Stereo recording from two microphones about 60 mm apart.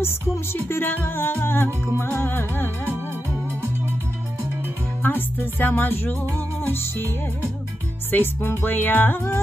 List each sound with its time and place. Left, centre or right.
0.0 s music: left
5.0 s music: left